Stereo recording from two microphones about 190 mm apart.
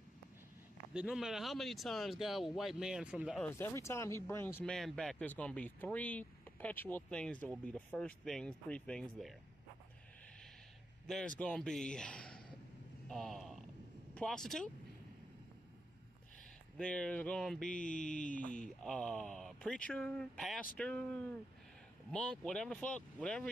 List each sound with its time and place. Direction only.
0.9 s speech: 5° right (ahead or behind)
3.3 s speech: 10° left (ahead or behind)
11.1 s speech: 5° left (ahead or behind)
13.1 s a sound: centre (ahead or behind)
14.1 s speech: 5° left (ahead or behind)
16.7 s speech: 5° left (ahead or behind)
17.7 s a sound: 40° left (ahead or behind)
18.8 s speech: 5° left (ahead or behind)